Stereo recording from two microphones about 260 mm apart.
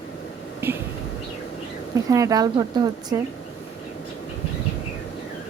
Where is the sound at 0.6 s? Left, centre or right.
Centre.